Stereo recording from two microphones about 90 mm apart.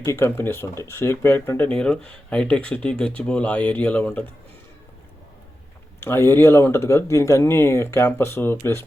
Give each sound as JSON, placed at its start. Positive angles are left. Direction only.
{"t": 0.0, "sound": "speech", "side_deg": 30}
{"t": 1.7, "sound": "speech", "side_deg": 10}
{"t": 6.0, "sound": "speech", "side_deg": 25}